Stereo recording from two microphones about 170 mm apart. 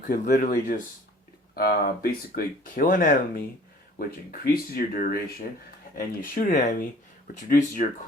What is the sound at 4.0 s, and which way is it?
Speech, 60° left (ahead or behind).